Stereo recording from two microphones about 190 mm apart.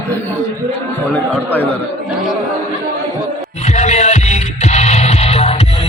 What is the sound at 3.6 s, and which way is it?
Music, 35° left (ahead or behind).